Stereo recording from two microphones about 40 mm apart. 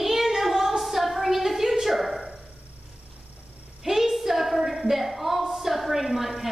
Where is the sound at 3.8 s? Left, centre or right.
Centre.